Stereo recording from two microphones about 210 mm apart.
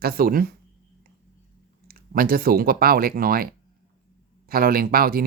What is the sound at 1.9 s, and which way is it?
Speech, 45° right (ahead or behind).